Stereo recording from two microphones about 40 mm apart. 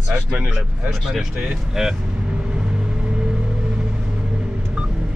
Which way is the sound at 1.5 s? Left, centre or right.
Centre.